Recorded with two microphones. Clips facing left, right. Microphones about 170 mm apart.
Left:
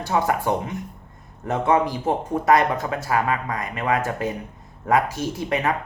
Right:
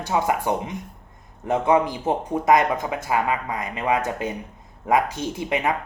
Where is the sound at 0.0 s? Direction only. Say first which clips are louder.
Left 1 dB; 15° right (ahead or behind).